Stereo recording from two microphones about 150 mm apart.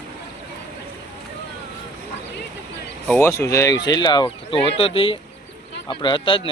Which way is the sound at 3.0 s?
15° left (ahead or behind).